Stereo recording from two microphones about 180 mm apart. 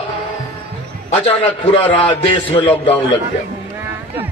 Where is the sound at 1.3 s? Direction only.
30° left (ahead or behind).